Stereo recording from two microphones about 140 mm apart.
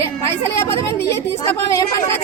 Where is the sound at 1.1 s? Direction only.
20° left (ahead or behind).